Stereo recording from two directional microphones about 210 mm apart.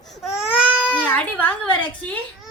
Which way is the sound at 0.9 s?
5° left (ahead or behind).